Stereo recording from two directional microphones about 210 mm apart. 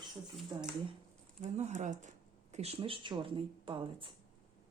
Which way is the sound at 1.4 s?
35° right (ahead or behind).